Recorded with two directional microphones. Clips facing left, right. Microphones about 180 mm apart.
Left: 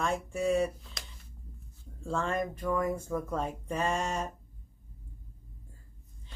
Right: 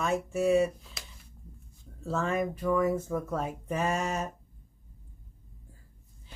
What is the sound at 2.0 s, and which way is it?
Speech, 5° right (ahead or behind).